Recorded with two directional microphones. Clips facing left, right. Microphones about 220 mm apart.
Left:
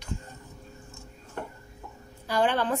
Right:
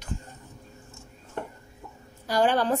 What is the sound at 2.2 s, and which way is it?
Speech, 40° right (ahead or behind).